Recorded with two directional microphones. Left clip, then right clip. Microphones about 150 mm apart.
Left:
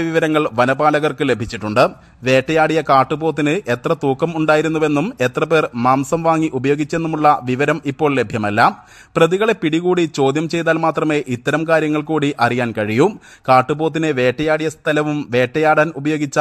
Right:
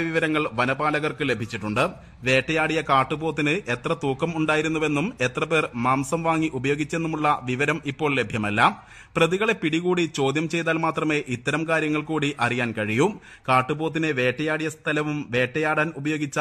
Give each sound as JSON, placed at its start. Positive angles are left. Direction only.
{"t": 0.0, "sound": "a man's voice", "side_deg": 45}